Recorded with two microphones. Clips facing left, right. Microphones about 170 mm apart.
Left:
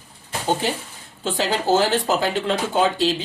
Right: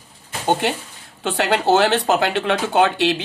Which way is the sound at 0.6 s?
65° right (ahead or behind).